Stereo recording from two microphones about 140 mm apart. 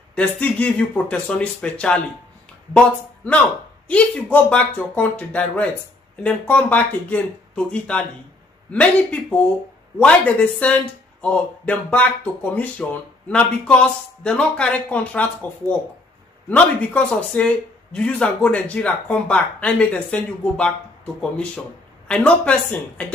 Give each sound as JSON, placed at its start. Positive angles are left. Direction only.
{"t": 0.1, "sound": "speech", "side_deg": 10}
{"t": 3.3, "sound": "speech", "side_deg": 10}
{"t": 16.4, "sound": "speech", "side_deg": 10}